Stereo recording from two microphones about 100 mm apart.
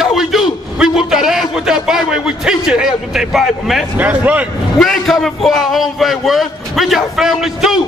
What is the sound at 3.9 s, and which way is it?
Speech, 15° right (ahead or behind).